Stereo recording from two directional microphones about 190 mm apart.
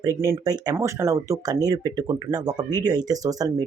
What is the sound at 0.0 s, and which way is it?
Speech, 15° right (ahead or behind).